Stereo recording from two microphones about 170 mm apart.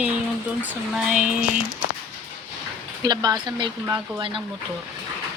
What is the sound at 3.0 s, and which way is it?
Speech, 25° right (ahead or behind).